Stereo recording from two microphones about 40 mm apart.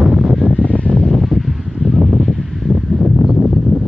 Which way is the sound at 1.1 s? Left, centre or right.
Centre.